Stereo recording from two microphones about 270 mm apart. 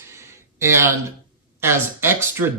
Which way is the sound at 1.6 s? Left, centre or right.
Centre.